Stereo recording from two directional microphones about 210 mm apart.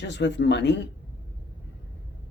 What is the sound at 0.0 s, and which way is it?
Speech, 55° left (ahead or behind).